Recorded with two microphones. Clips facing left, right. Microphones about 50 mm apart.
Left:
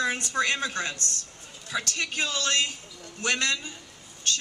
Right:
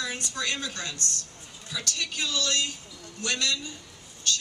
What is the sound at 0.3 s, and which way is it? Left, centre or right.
Speech, left.